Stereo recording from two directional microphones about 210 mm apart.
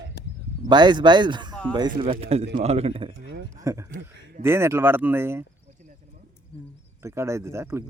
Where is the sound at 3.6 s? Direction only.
15° right (ahead or behind).